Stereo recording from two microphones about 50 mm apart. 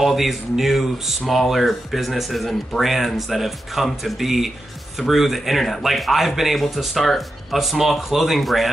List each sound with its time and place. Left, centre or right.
0.0 s speech: centre